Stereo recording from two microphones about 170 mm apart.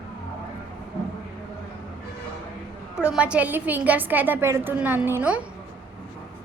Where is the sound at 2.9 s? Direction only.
5° right (ahead or behind).